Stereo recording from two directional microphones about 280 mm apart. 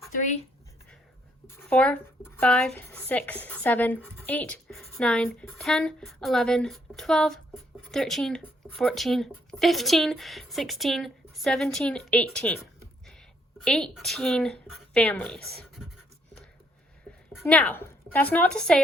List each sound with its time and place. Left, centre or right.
0.1 s speech: left
1.5 s speech: centre
13.7 s speech: centre
17.4 s speech: centre